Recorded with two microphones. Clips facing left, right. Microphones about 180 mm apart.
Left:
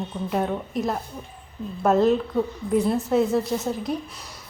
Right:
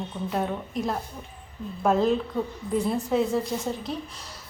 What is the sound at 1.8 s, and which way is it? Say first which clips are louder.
A woman's voice: left 3 dB; 5° left (ahead or behind).